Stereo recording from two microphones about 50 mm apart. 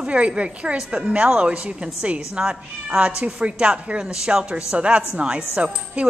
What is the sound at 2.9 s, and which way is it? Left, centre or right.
A woman's voice, right.